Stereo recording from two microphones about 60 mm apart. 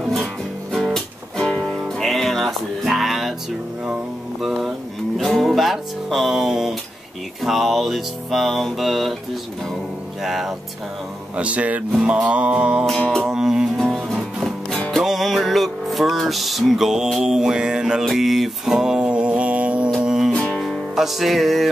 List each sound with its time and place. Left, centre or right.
0.7 s music: centre
4.4 s a sound: centre
5.1 s music: centre
10.2 s speech: centre
11.3 s mantra: right
13.3 s music: centre
13.9 s music: centre; by 19.9 s right
20.0 s music: centre
20.5 s music: centre